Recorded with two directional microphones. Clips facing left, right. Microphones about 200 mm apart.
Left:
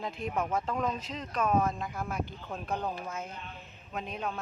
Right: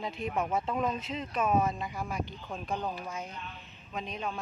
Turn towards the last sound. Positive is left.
turn(degrees=5)  # may be behind; listen again after turning